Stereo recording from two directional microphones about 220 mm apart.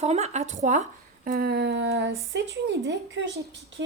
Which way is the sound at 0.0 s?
30° right (ahead or behind).